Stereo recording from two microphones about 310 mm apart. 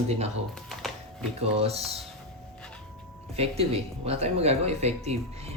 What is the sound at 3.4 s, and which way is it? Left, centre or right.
Speech, centre.